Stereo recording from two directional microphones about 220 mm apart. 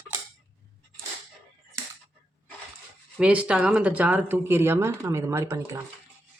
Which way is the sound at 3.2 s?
5° right (ahead or behind).